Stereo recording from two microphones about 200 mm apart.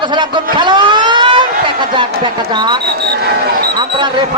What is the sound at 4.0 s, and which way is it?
Alarm, 25° right (ahead or behind).